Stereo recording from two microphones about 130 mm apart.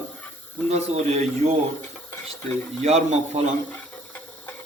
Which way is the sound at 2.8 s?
55° right (ahead or behind).